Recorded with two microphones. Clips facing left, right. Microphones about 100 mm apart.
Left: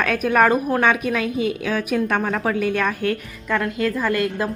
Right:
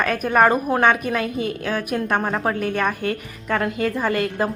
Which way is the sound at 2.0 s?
20° right (ahead or behind).